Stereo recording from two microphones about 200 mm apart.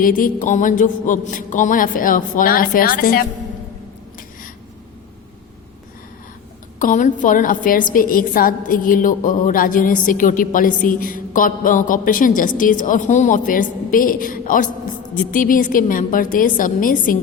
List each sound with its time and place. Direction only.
0.0 s a woman's voice: 45° left (ahead or behind)
6.7 s a woman's voice: 40° left (ahead or behind)